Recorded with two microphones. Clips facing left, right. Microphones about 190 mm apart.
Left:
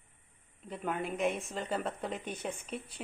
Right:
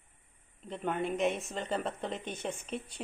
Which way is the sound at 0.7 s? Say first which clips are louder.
Right 2 dB; 5° left (ahead or behind).